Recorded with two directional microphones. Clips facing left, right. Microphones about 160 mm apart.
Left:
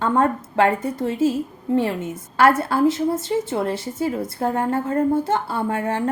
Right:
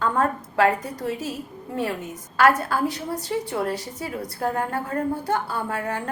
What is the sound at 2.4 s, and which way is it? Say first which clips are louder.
A woman's voice: left 3 dB; 25° left (ahead or behind).